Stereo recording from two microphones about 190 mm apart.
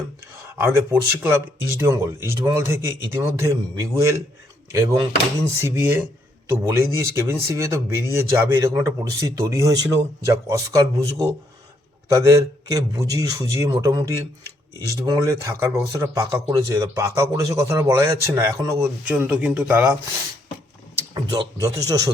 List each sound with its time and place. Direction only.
0.4 s speech: 10° right (ahead or behind)
21.2 s speech: 20° right (ahead or behind)